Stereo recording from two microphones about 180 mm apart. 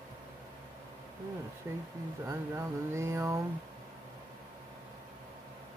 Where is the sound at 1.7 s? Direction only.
15° right (ahead or behind).